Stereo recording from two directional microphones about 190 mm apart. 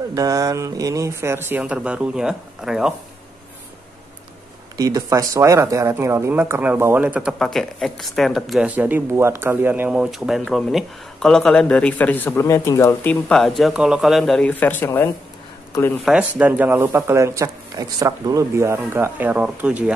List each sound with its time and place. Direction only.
0.1 s speech: 20° right (ahead or behind); by 2.9 s 5° right (ahead or behind)
4.7 s speech: 20° right (ahead or behind); by 16.0 s 15° left (ahead or behind)
16.1 s speech: 5° right (ahead or behind)